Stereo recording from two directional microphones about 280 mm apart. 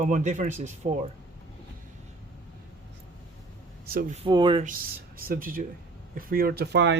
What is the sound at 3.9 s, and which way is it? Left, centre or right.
Speech, right.